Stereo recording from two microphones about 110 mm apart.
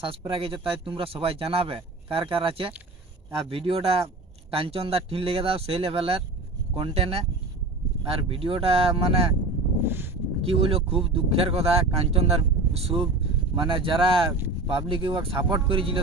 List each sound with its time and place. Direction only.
0.3 s speech: 55° right (ahead or behind)
9.8 s a sound: 20° right (ahead or behind)
10.4 s speech: 60° right (ahead or behind)
13.6 s speech: 50° right (ahead or behind)